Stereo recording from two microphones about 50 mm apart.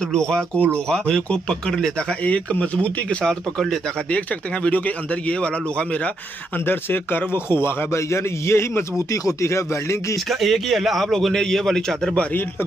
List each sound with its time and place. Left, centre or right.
0.1 s speech: centre
3.3 s speech: centre
4.6 s speech: left
6.6 s a man's voice: left
10.1 s a man's voice: centre